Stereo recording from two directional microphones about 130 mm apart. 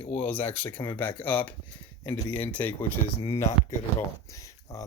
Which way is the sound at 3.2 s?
55° left (ahead or behind).